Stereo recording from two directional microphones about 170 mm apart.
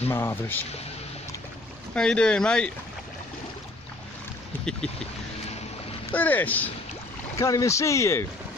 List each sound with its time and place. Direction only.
0.1 s speech: 15° left (ahead or behind)
2.0 s speech: 5° left (ahead or behind)
6.1 s speech: 10° left (ahead or behind)